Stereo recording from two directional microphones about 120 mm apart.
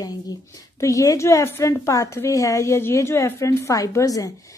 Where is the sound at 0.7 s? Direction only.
25° left (ahead or behind).